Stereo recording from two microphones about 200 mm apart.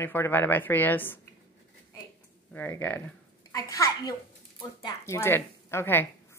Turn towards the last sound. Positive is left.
turn(degrees=10)  # may be behind; listen again after turning